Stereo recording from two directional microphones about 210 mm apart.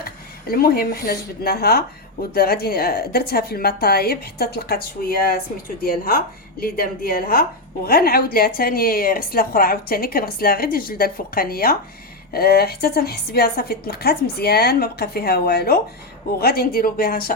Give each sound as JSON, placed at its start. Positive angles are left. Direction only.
{"t": 0.0, "sound": "a woman's voice", "side_deg": 45}